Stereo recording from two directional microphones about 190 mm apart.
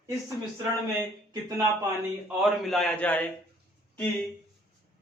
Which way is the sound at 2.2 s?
Centre (ahead or behind).